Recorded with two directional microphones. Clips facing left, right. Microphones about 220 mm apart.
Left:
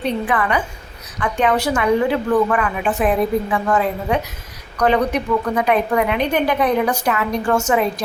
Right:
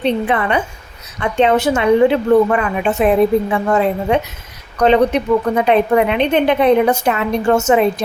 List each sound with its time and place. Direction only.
0.0 s a woman's voice: 25° right (ahead or behind)